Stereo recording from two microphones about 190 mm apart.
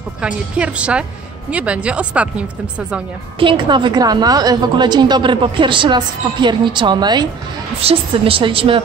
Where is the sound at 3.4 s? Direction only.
25° right (ahead or behind).